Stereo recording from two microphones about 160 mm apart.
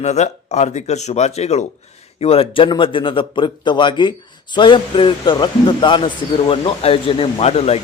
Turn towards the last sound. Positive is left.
turn(degrees=40)  # may be behind; listen again after turning